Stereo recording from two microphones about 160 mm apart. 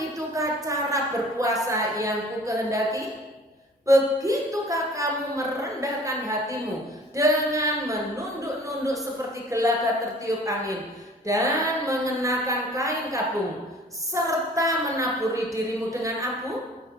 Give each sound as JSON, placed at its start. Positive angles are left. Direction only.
{"t": 0.3, "sound": "a woman's voice", "side_deg": -20}